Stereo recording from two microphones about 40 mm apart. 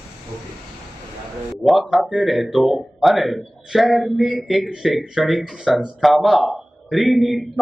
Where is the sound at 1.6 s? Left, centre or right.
Centre.